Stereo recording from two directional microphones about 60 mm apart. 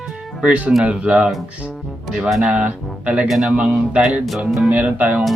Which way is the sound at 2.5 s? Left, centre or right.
Right.